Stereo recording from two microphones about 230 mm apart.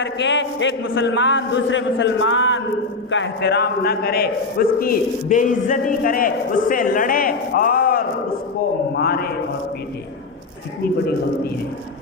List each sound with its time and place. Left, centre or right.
0.0 s a man's voice: left